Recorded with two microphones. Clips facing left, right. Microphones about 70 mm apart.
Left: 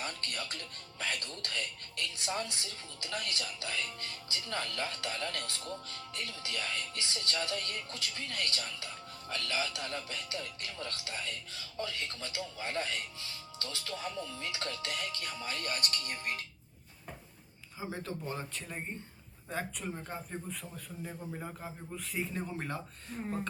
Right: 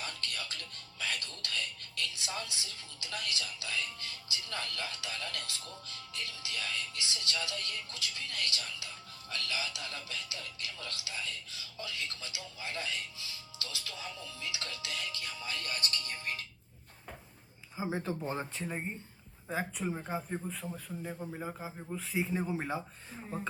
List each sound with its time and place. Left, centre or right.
0.0 s music: left
0.3 s speech: left
17.7 s a man's voice: right
20.5 s a man's voice: centre
21.0 s a man's voice: centre